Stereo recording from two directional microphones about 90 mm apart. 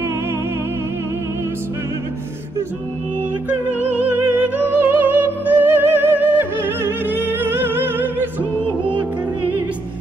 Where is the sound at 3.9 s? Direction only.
20° right (ahead or behind).